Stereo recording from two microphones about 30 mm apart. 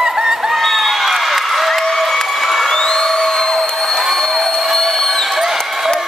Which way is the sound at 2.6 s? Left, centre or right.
Centre.